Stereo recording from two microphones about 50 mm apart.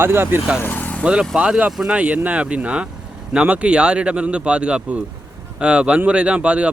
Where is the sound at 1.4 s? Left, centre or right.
Right.